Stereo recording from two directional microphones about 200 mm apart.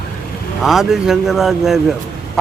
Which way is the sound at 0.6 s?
Centre (ahead or behind).